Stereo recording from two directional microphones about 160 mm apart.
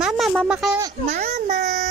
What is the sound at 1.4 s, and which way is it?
Speech, 45° right (ahead or behind).